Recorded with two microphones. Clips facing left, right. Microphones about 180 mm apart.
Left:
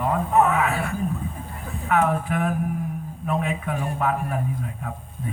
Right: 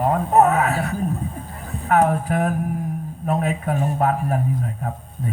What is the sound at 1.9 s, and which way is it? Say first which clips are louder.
A man's voice: right 4 dB; 40° right (ahead or behind).